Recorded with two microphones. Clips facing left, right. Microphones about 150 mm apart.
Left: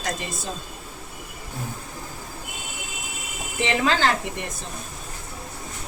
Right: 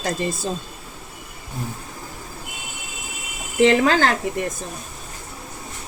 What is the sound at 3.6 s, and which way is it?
Speech, 50° right (ahead or behind).